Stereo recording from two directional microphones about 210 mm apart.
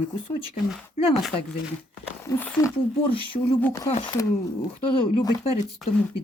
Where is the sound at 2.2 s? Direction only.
10° left (ahead or behind).